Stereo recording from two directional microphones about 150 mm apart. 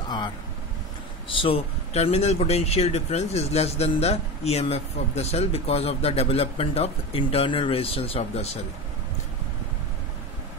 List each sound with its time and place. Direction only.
1.3 s speech: 35° left (ahead or behind)